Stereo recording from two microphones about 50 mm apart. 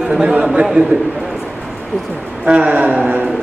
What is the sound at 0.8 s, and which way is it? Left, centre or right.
Speech, right.